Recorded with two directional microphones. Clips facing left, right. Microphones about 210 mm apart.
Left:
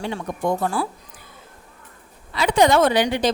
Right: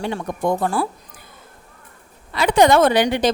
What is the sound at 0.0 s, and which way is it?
Speech, 55° right (ahead or behind).